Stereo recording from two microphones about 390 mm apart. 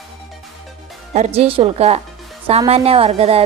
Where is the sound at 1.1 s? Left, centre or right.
Centre.